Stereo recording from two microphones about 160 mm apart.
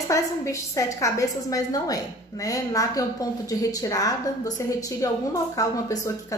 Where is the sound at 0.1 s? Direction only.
20° left (ahead or behind).